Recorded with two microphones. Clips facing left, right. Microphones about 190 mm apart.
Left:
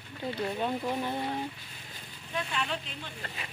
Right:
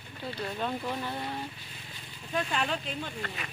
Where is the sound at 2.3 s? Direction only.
45° right (ahead or behind).